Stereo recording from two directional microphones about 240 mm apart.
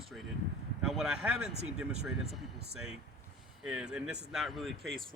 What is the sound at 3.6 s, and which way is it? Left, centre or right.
Speech, centre.